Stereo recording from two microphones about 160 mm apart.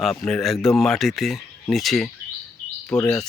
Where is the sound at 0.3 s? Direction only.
Centre (ahead or behind).